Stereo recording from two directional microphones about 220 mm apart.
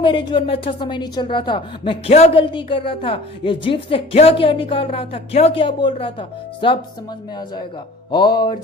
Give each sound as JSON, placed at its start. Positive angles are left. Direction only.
{"t": 0.0, "sound": "a woman's voice", "side_deg": 20}
{"t": 8.1, "sound": "a woman's voice", "side_deg": 20}